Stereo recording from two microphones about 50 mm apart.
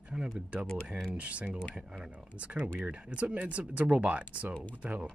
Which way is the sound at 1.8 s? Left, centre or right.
Centre.